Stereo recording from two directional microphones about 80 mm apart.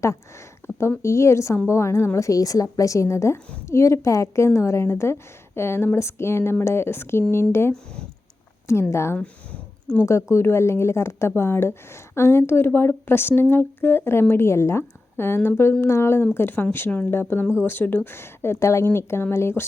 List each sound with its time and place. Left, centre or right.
0.8 s speech: left
8.6 s speech: left
9.1 s a sound: centre
10.0 s speech: left